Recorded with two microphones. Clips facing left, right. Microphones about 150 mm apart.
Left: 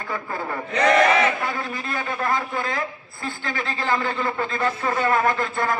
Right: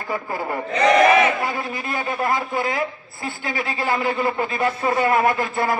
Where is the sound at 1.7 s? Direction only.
20° right (ahead or behind).